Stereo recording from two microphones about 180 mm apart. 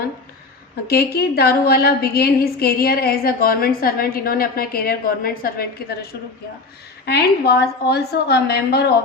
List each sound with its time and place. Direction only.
0.9 s a woman's voice: 60° left (ahead or behind)
7.0 s a woman's voice: 65° left (ahead or behind)